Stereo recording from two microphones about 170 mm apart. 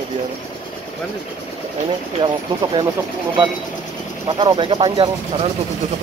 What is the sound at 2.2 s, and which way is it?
Speech, 25° right (ahead or behind).